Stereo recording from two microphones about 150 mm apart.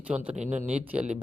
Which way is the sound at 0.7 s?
10° right (ahead or behind).